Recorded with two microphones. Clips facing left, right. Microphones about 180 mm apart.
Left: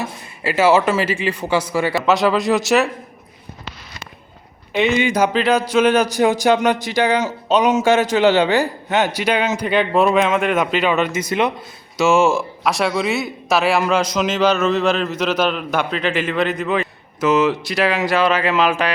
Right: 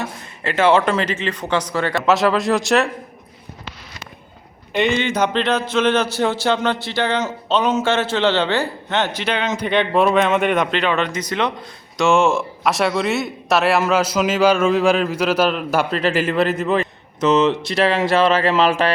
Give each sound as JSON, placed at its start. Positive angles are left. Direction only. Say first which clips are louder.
{"t": 0.0, "sound": "a man's voice", "louder": "left 1 dB", "side_deg": 5}
{"t": 4.7, "sound": "a man's voice", "louder": "left 2 dB", "side_deg": 5}
{"t": 17.2, "sound": "speech", "louder": "right 1 dB", "side_deg": -25}